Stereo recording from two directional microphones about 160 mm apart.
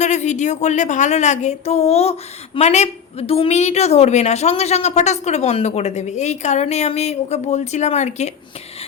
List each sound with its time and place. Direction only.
0.0 s a woman's voice: 50° left (ahead or behind)